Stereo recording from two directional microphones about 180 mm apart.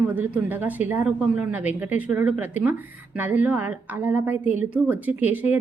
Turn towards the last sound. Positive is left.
turn(degrees=-10)  # may be behind; listen again after turning